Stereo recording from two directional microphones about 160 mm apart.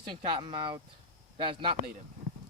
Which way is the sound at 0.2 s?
35° right (ahead or behind).